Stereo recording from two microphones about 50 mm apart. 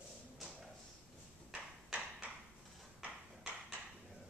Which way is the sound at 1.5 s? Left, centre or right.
Right.